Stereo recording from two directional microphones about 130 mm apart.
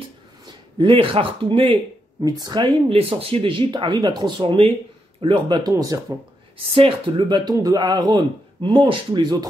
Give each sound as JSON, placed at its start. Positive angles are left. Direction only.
{"t": 0.7, "sound": "speech", "side_deg": -40}
{"t": 2.2, "sound": "a man's voice", "side_deg": -30}
{"t": 2.9, "sound": "a man's voice", "side_deg": -45}
{"t": 4.4, "sound": "a man's voice", "side_deg": -45}
{"t": 6.7, "sound": "a man's voice", "side_deg": -45}